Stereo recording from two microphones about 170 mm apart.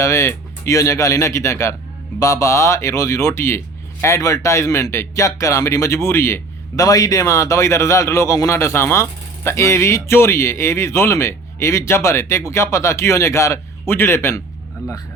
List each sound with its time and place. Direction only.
0.0 s speech: 15° left (ahead or behind)